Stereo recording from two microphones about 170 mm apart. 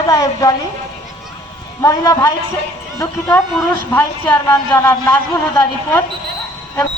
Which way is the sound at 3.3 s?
15° left (ahead or behind).